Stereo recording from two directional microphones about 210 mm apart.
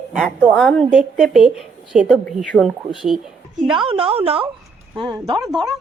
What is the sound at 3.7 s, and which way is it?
A woman's voice, 25° right (ahead or behind).